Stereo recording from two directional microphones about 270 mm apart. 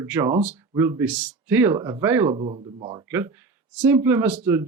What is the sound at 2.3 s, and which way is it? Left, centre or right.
Speech, centre.